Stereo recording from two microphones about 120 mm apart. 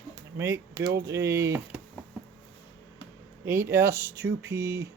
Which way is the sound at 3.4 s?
20° right (ahead or behind).